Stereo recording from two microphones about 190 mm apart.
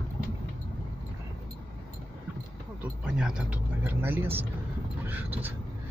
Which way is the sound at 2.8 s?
5° right (ahead or behind).